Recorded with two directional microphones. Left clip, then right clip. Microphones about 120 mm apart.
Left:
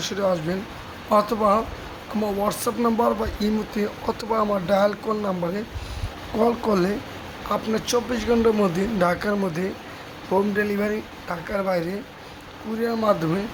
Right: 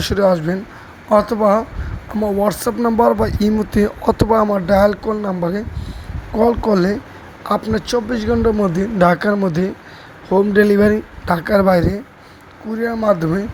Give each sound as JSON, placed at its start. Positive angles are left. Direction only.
{"t": 0.0, "sound": "speech", "side_deg": -50}
{"t": 4.4, "sound": "speech", "side_deg": -40}
{"t": 9.0, "sound": "speech", "side_deg": -45}
{"t": 10.5, "sound": "speech", "side_deg": -50}
{"t": 12.7, "sound": "speech", "side_deg": 0}
{"t": 13.1, "sound": "speech", "side_deg": -40}